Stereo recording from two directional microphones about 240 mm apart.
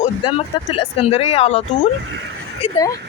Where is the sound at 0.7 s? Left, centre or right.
Left.